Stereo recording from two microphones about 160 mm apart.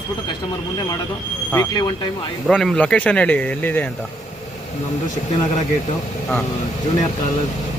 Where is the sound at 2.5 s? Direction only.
5° left (ahead or behind).